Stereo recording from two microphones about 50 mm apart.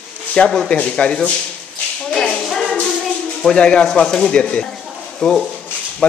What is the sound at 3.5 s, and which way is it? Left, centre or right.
A man's voice, centre.